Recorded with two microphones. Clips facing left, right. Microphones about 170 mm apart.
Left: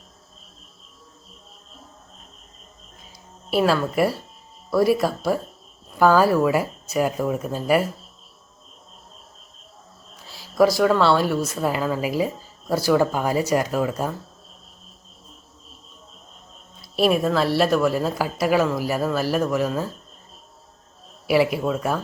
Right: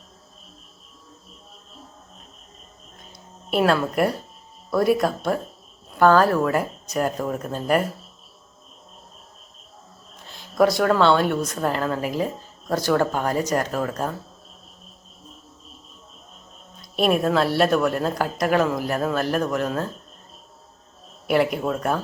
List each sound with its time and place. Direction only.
3.5 s a woman's voice: centre (ahead or behind)
10.2 s speech: 5° left (ahead or behind)
16.8 s a woman's voice: centre (ahead or behind)
21.2 s a woman's voice: 5° left (ahead or behind)